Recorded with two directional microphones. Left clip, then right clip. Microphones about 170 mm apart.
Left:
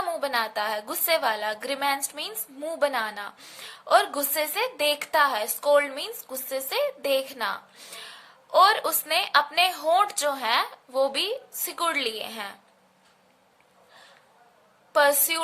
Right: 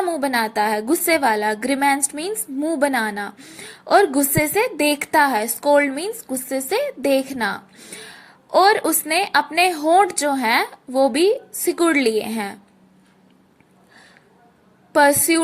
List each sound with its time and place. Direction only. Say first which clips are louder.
0.2 s a woman's voice: right 7 dB; 25° right (ahead or behind)
14.9 s a woman's voice: right 6 dB; 25° right (ahead or behind)